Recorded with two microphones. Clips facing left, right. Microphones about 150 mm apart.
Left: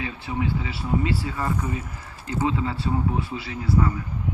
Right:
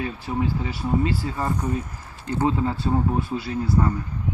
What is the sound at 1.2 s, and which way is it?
A man's voice, 40° right (ahead or behind).